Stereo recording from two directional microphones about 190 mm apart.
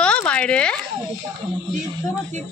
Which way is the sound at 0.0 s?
5° left (ahead or behind).